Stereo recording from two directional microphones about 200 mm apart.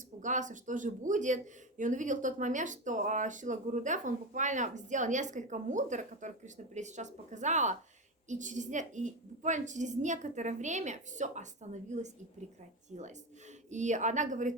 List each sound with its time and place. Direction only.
0.2 s speech: 40° right (ahead or behind)
13.7 s speech: 35° right (ahead or behind)